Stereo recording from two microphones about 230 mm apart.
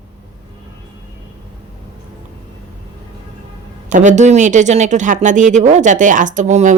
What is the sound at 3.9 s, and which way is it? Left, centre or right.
Speech, right.